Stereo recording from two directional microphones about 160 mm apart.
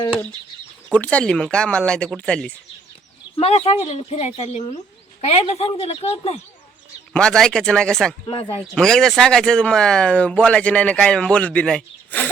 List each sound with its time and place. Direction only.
0.9 s speech: 10° left (ahead or behind)
3.3 s speech: 40° left (ahead or behind)
7.1 s speech: 5° left (ahead or behind)
8.3 s speech: 35° left (ahead or behind)
8.7 s speech: 5° left (ahead or behind)